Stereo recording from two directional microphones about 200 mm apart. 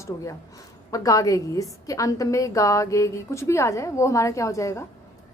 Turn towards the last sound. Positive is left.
turn(degrees=15)  # may be behind; listen again after turning